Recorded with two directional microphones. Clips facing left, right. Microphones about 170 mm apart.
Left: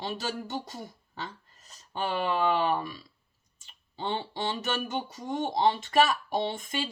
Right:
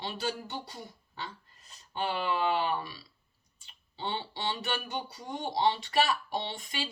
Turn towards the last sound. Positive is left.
turn(degrees=45)  # may be behind; listen again after turning